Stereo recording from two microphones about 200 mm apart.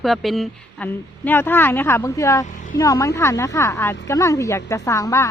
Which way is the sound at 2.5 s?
40° left (ahead or behind).